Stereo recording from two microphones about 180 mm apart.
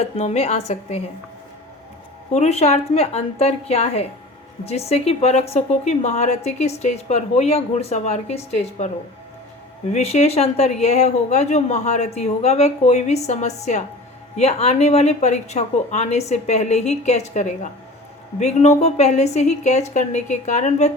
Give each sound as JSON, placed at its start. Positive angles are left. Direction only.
{"t": 0.0, "sound": "a woman's voice", "side_deg": 35}
{"t": 2.3, "sound": "a woman's voice", "side_deg": 35}
{"t": 9.9, "sound": "a woman's voice", "side_deg": 35}